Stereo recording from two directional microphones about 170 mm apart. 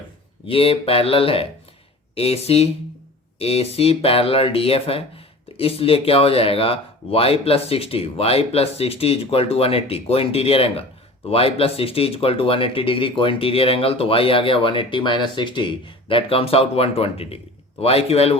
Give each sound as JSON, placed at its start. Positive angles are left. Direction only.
{"t": 0.4, "sound": "speech", "side_deg": 35}